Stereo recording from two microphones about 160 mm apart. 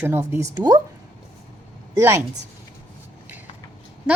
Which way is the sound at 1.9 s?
15° right (ahead or behind).